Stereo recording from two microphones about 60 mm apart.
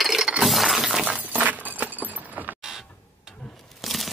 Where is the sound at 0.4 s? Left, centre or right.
Centre.